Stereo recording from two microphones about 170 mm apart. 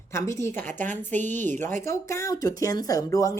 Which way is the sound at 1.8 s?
15° left (ahead or behind).